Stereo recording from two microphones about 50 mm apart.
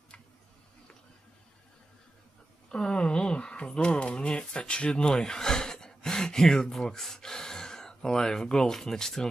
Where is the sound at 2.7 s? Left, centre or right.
Centre.